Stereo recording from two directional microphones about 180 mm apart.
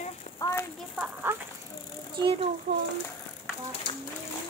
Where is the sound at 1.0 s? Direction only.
10° right (ahead or behind).